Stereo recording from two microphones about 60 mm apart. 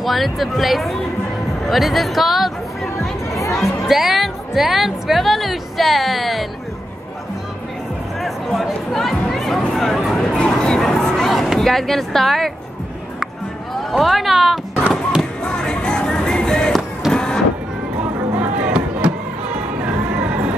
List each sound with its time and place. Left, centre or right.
0.0 s speech: centre
3.5 s speech: centre
8.5 s chatter: centre
13.9 s speech: centre
15.4 s music: centre
17.1 s vehicle: centre
18.4 s music: centre